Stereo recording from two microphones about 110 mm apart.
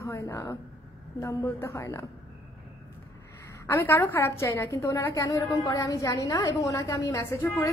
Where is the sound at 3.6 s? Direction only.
20° left (ahead or behind).